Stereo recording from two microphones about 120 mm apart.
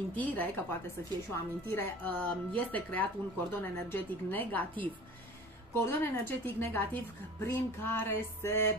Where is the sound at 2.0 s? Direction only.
15° left (ahead or behind).